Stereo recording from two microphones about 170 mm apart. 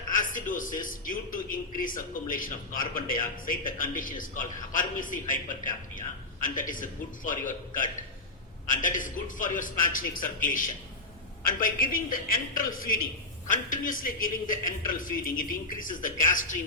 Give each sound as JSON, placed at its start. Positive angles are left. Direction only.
{"t": 0.1, "sound": "a man's voice", "side_deg": 50}
{"t": 11.6, "sound": "a man's voice", "side_deg": 55}